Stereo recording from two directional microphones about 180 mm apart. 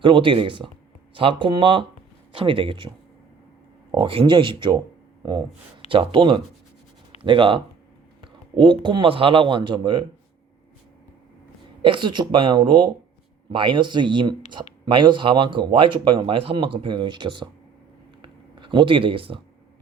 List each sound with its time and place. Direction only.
0.0 s speech: 30° right (ahead or behind)
3.9 s speech: 30° right (ahead or behind)
11.8 s speech: 25° right (ahead or behind)
18.2 s a sound: 25° right (ahead or behind)